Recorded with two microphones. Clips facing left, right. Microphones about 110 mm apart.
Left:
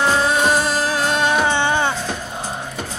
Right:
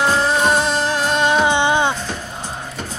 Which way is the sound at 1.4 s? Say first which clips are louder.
Right 2 dB; 15° right (ahead or behind).